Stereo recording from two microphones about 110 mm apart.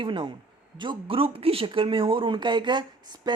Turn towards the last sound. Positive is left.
turn(degrees=-45)  # may be behind; listen again after turning